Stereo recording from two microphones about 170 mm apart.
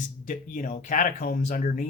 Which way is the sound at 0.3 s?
55° left (ahead or behind).